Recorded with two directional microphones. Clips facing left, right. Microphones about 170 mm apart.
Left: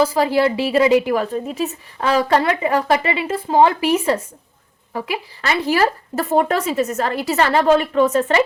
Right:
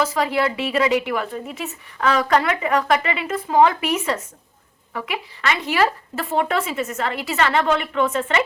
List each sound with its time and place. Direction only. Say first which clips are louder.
0.0 s a woman's voice: left 5 dB; 30° left (ahead or behind)